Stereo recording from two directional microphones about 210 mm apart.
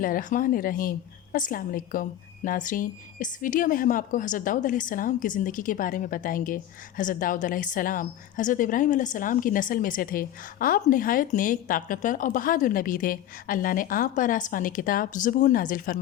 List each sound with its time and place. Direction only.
0.0 s a woman's voice: 40° left (ahead or behind)